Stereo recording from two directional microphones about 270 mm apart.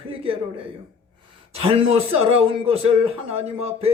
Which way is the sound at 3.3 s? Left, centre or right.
Right.